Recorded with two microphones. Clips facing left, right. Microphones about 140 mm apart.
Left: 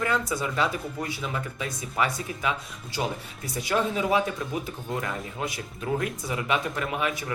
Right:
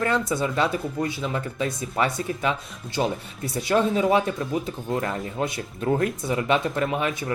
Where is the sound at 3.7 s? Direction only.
35° right (ahead or behind).